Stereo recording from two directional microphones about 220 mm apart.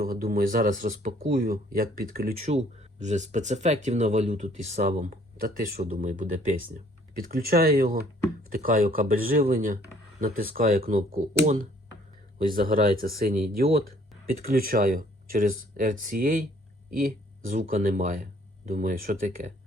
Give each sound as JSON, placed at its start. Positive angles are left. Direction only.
{"t": 0.0, "sound": "speech", "side_deg": -40}
{"t": 2.4, "sound": "speech", "side_deg": -30}
{"t": 12.5, "sound": "speech", "side_deg": -40}